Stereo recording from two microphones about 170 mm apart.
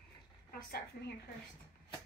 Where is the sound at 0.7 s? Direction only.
70° left (ahead or behind).